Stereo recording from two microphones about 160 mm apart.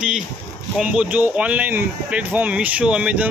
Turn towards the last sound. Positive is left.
turn(degrees=-5)  # may be behind; listen again after turning